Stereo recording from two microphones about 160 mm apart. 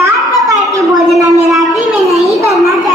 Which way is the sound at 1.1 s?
Centre (ahead or behind).